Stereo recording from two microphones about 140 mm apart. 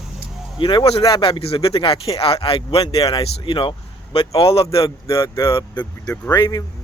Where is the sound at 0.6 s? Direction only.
40° left (ahead or behind).